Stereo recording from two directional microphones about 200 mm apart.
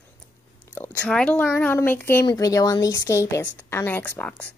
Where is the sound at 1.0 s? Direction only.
5° left (ahead or behind).